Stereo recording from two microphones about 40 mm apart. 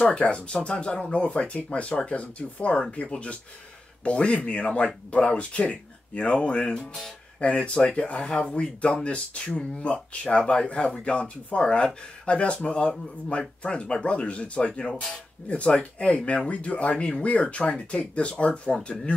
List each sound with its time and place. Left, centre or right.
0.0 s speech: left